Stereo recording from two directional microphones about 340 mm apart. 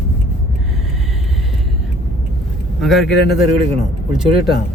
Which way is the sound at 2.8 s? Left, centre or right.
Centre.